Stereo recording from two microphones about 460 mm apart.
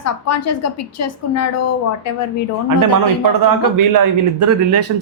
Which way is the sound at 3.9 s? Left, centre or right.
Right.